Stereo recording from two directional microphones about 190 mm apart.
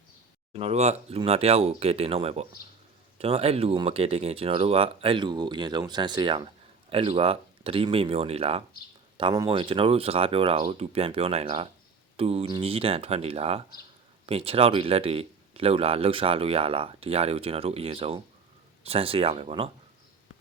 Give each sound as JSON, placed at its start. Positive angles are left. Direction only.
{"t": 0.5, "sound": "a man's voice", "side_deg": -35}